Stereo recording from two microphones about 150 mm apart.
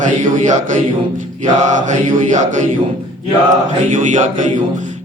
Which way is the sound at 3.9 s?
55° right (ahead or behind).